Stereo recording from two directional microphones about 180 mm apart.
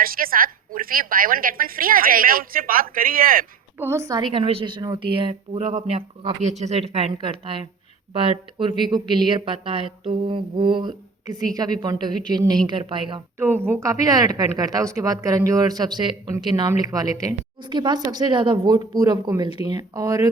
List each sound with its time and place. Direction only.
0.0 s a woman's voice: 55° right (ahead or behind)
3.8 s a woman's voice: 15° right (ahead or behind)
13.4 s a woman's voice: 10° right (ahead or behind)